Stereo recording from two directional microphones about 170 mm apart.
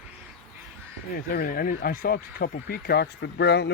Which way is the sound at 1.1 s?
60° left (ahead or behind).